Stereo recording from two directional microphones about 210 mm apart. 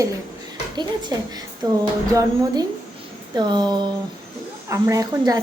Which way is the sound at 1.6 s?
20° right (ahead or behind).